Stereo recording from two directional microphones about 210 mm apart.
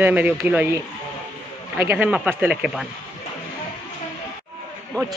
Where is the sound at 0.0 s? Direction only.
10° right (ahead or behind).